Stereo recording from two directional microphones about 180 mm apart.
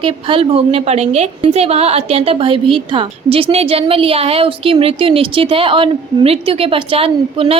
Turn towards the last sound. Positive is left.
turn(degrees=-30)  # may be behind; listen again after turning